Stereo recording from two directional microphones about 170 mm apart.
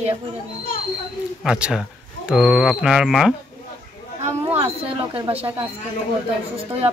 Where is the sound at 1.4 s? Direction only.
5° right (ahead or behind).